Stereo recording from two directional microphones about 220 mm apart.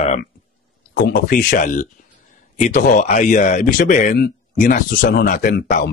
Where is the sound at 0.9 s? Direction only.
40° left (ahead or behind).